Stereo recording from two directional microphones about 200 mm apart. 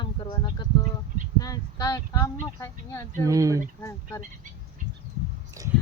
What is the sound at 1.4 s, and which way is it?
Speech, 20° left (ahead or behind).